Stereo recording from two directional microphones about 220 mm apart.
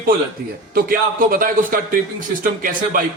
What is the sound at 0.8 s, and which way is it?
A man's voice, 40° right (ahead or behind).